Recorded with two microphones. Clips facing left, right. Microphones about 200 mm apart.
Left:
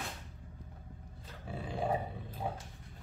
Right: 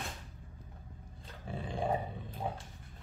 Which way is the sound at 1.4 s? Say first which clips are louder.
Even; 5° left (ahead or behind).